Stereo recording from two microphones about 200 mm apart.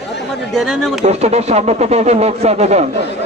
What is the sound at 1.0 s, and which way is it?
Speech, 30° right (ahead or behind).